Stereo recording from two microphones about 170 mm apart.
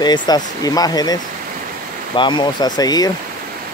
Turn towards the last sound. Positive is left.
turn(degrees=25)  # may be behind; listen again after turning